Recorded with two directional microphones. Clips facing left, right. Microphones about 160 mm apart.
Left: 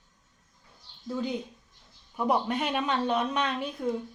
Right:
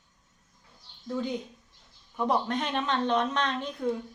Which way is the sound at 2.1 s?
10° left (ahead or behind).